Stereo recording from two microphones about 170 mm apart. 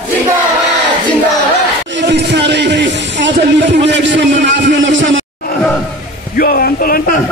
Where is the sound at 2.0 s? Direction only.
90° right.